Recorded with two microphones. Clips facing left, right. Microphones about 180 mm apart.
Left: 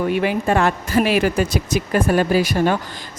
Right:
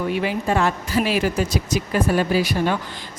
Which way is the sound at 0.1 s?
55° left (ahead or behind).